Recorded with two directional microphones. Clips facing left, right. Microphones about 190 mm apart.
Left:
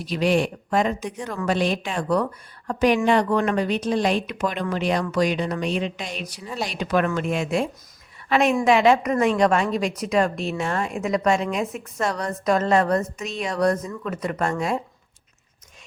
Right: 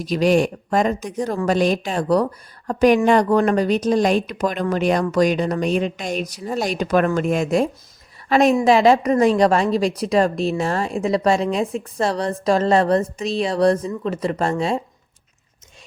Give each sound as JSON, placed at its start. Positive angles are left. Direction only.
{"t": 0.0, "sound": "a woman's voice", "side_deg": -40}